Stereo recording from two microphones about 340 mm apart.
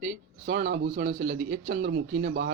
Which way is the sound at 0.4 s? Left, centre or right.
Right.